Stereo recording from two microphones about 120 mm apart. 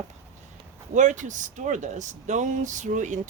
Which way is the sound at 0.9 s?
90° right.